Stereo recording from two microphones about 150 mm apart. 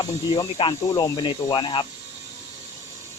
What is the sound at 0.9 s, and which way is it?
Cricket, 30° left (ahead or behind).